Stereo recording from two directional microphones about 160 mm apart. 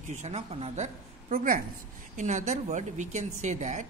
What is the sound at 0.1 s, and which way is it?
Speech, 45° right (ahead or behind).